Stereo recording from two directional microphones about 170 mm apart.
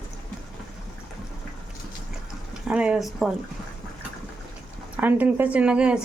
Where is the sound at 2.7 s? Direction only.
5° right (ahead or behind).